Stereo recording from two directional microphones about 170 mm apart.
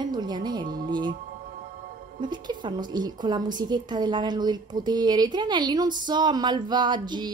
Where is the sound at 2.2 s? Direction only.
25° right (ahead or behind).